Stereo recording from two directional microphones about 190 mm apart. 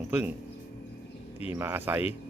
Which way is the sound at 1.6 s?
10° right (ahead or behind).